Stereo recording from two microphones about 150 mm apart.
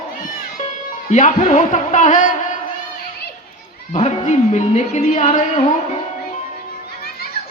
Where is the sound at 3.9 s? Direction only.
50° left (ahead or behind).